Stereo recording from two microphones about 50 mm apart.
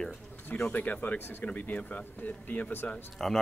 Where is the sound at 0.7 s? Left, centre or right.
Left.